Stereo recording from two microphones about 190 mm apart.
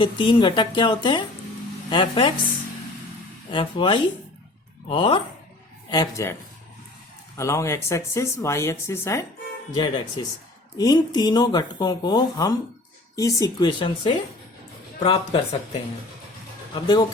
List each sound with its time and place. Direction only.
0.0 s speech: 25° left (ahead or behind)
3.5 s speech: 25° left (ahead or behind)
7.3 s a man's voice: 15° left (ahead or behind)
16.7 s speech: 20° left (ahead or behind)